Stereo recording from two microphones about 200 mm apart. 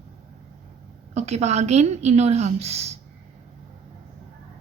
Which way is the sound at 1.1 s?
35° right (ahead or behind).